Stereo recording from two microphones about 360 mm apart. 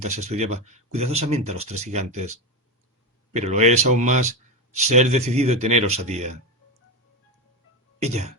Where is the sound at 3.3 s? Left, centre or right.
Centre.